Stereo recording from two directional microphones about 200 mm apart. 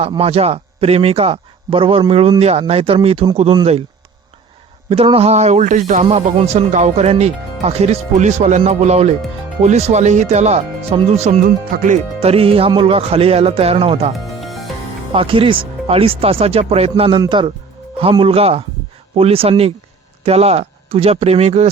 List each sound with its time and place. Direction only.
0.0 s speech: 30° right (ahead or behind)
4.9 s speech: 30° right (ahead or behind)
14.4 s music: centre (ahead or behind)
15.1 s speech: 25° right (ahead or behind)